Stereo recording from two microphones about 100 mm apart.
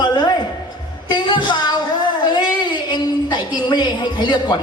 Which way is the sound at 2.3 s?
45° left (ahead or behind).